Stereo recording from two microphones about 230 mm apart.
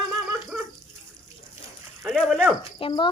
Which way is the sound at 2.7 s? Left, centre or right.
Left.